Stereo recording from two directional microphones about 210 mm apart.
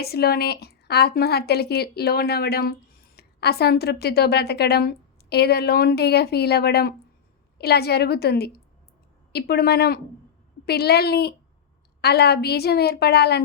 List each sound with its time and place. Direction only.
0.0 s a woman's voice: 50° left (ahead or behind)